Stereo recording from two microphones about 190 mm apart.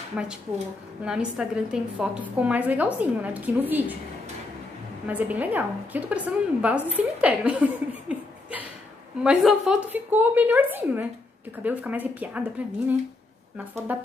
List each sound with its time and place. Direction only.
0.1 s a woman's voice: 5° right (ahead or behind)
5.0 s a woman's voice: 10° right (ahead or behind)
13.9 s a woman's voice: 10° right (ahead or behind)